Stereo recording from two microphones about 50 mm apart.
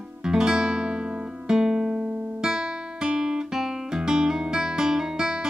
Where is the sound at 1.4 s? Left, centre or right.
Centre.